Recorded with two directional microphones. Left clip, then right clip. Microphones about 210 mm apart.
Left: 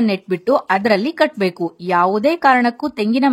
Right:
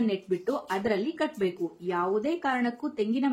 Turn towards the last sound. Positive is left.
turn(degrees=45)  # may be behind; listen again after turning